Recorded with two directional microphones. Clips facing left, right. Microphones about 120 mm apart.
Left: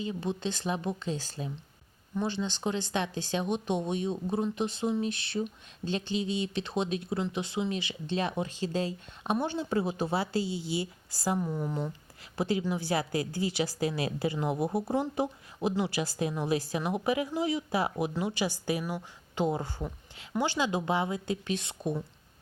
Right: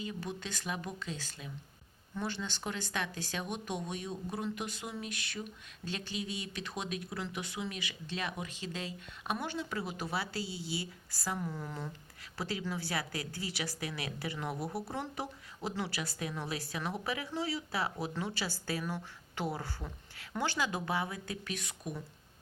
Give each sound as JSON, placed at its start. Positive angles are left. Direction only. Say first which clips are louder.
{"t": 0.0, "sound": "a woman's voice", "louder": "left 7 dB", "side_deg": 25}
{"t": 2.1, "sound": "a woman's voice", "louder": "left 6 dB", "side_deg": 20}